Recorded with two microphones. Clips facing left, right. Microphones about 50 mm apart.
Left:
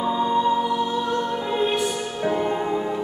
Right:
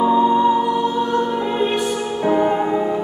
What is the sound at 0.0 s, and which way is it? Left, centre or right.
Music, centre.